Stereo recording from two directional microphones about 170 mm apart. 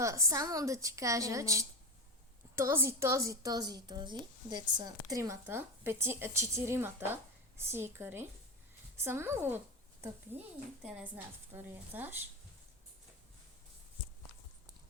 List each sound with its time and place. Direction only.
0.0 s a woman's voice: 20° right (ahead or behind)
11.5 s a woman's voice: 10° right (ahead or behind)